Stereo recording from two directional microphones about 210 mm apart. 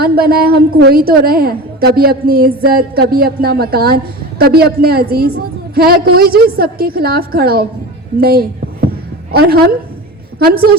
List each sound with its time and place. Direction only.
0.0 s a woman's voice: 45° right (ahead or behind)